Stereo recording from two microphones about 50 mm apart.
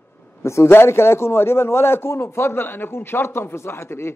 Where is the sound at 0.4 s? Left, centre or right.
Left.